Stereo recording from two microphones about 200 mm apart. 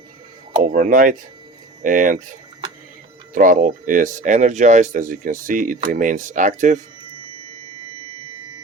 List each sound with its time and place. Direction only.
0.6 s speech: 45° right (ahead or behind)
3.3 s speech: 40° right (ahead or behind)